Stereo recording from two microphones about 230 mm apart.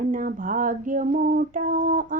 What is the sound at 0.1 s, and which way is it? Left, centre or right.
Female singing, right.